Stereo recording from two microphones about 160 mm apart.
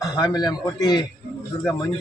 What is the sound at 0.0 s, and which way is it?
A man's voice, 25° left (ahead or behind).